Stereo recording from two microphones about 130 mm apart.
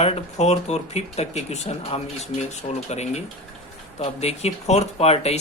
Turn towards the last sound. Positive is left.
turn(degrees=55)  # may be behind; listen again after turning